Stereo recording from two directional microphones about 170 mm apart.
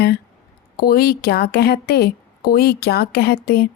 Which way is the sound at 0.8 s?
65° left (ahead or behind).